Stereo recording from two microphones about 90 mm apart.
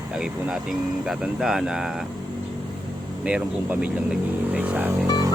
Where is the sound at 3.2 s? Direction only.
10° right (ahead or behind).